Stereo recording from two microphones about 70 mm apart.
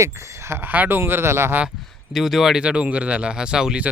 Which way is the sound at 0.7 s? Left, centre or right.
Right.